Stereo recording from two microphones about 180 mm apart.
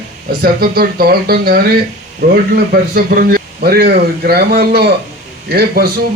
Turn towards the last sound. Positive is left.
turn(degrees=-60)  # may be behind; listen again after turning